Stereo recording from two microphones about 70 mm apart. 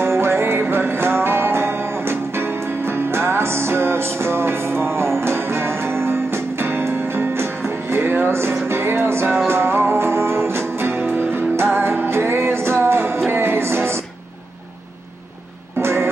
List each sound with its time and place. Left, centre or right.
0.0 s music: right
15.8 s music: right